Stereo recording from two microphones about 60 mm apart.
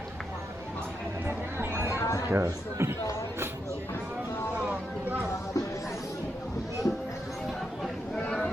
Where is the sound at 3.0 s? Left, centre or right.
Left.